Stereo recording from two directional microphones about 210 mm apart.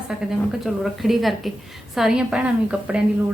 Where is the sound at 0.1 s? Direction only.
5° right (ahead or behind).